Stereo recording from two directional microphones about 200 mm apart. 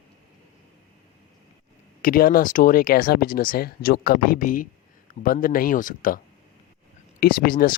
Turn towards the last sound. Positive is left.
turn(degrees=45)  # may be behind; listen again after turning